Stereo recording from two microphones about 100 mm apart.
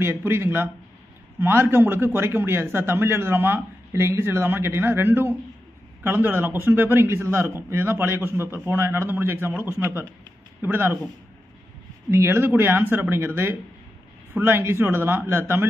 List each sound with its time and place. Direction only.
0.0 s a man's voice: 25° right (ahead or behind)
12.1 s a man's voice: 25° right (ahead or behind)